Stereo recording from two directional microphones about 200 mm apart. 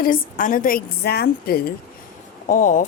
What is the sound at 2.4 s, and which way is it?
Speech, 40° left (ahead or behind).